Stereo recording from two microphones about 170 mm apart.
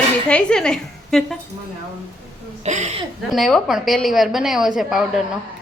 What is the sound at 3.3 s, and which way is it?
A woman's voice, centre (ahead or behind).